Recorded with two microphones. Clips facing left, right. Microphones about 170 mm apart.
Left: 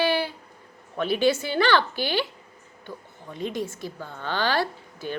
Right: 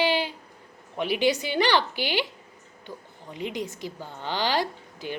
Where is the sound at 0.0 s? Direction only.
15° right (ahead or behind).